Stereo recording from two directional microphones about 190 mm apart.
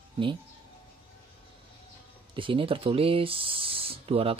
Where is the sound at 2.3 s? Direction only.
25° right (ahead or behind).